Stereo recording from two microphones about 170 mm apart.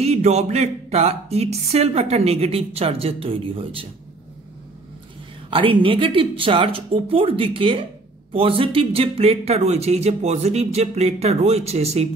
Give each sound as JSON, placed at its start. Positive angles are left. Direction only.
{"t": 0.0, "sound": "speech", "side_deg": -40}
{"t": 5.5, "sound": "speech", "side_deg": -30}